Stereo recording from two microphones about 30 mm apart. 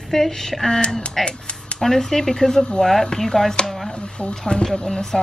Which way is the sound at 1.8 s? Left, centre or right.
Centre.